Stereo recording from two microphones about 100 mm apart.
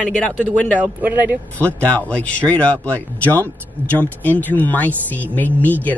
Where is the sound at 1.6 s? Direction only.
15° left (ahead or behind).